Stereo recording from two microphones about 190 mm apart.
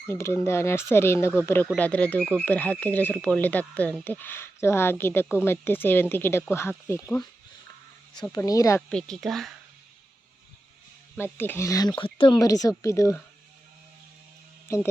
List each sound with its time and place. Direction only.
0.1 s speech: 15° left (ahead or behind)
8.3 s speech: 15° left (ahead or behind)
8.9 s a woman's voice: 5° left (ahead or behind)
11.2 s speech: 10° left (ahead or behind)